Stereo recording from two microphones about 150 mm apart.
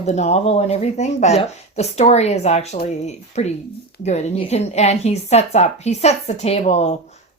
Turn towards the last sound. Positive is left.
turn(degrees=45)  # may be behind; listen again after turning